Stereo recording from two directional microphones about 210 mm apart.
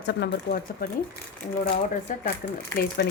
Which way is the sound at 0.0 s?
55° left (ahead or behind).